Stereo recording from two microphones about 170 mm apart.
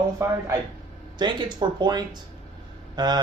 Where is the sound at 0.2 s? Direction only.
15° right (ahead or behind).